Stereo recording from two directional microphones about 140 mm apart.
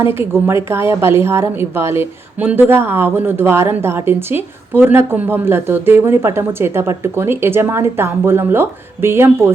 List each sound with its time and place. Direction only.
0.0 s a woman's voice: 15° right (ahead or behind)